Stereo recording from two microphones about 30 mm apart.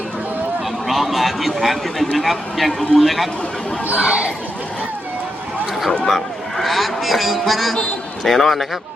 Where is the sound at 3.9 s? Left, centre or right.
Right.